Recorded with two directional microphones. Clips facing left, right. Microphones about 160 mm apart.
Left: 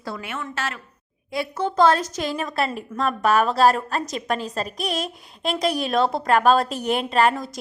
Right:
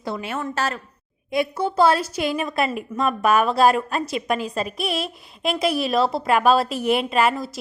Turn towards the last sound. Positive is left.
turn(degrees=-5)  # may be behind; listen again after turning